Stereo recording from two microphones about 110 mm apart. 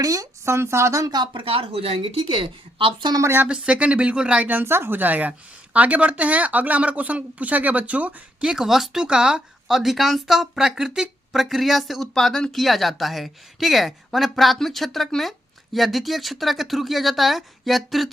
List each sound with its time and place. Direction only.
0.0 s speech: 30° right (ahead or behind); by 3.1 s 50° right (ahead or behind)
3.1 s speech: 30° right (ahead or behind)
3.3 s speech: 10° right (ahead or behind)